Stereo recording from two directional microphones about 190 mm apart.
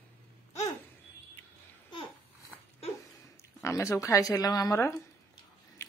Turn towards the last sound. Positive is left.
turn(degrees=15)  # may be behind; listen again after turning